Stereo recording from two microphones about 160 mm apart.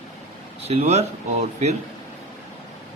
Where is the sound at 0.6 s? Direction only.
40° right (ahead or behind).